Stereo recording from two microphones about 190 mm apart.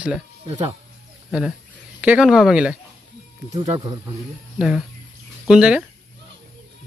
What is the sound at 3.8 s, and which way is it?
Speech, 20° right (ahead or behind).